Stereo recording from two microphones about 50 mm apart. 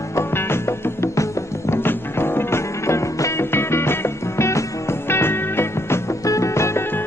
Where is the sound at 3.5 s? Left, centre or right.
Left.